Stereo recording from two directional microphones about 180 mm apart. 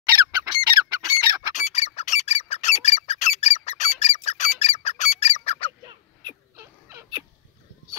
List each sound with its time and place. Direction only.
0.1 s bird: 25° right (ahead or behind)
1.5 s squawk: 40° left (ahead or behind)
5.9 s cat: 20° right (ahead or behind)